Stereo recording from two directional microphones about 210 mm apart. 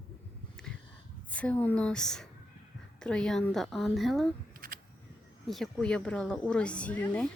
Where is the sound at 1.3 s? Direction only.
5° left (ahead or behind).